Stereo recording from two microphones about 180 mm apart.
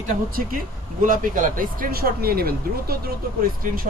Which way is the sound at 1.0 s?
50° right (ahead or behind).